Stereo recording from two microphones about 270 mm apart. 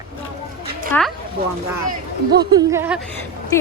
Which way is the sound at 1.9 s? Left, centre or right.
Right.